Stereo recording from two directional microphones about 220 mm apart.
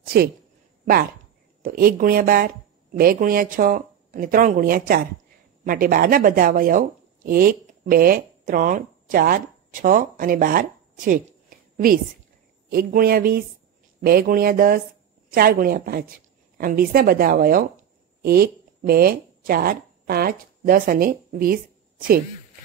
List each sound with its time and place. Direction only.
0.0 s speech: 45° right (ahead or behind)
1.6 s a woman's voice: 40° right (ahead or behind)
11.7 s a sound: 40° right (ahead or behind)
12.6 s a woman's voice: 45° right (ahead or behind)